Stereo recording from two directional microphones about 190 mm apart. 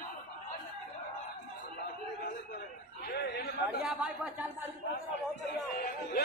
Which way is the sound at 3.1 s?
60° left (ahead or behind).